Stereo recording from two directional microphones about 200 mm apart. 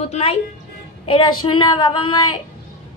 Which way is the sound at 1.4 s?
25° left (ahead or behind).